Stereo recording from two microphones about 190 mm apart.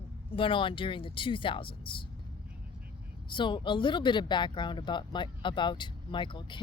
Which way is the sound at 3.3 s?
25° left (ahead or behind).